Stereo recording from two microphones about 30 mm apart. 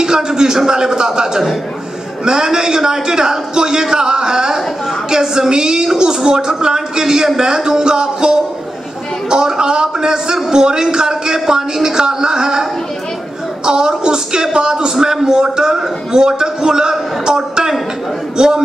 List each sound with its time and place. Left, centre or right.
0.0 s a man's voice: right
13.7 s a man's voice: right
18.4 s a man's voice: right